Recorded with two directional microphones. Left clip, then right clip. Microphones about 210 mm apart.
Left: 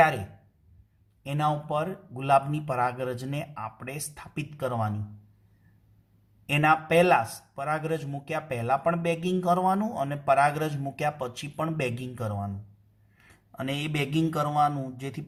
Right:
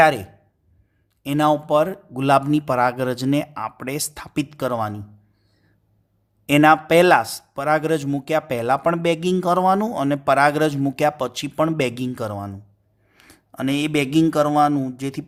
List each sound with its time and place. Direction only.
1.2 s a man's voice: 50° right (ahead or behind)
6.5 s a man's voice: 45° right (ahead or behind)